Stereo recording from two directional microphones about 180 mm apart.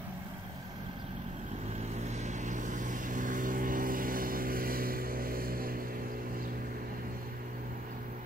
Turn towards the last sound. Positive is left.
turn(degrees=-50)  # may be behind; listen again after turning